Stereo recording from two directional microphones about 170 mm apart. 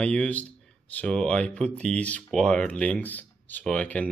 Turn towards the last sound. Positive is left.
turn(degrees=5)  # may be behind; listen again after turning